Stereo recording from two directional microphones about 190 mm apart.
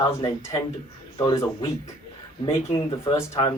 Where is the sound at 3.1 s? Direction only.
20° left (ahead or behind).